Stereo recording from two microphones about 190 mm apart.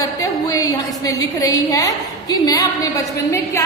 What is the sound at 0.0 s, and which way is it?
A woman's voice, 20° left (ahead or behind).